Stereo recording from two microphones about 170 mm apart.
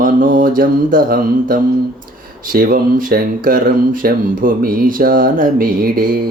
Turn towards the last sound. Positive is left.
turn(degrees=-60)  # may be behind; listen again after turning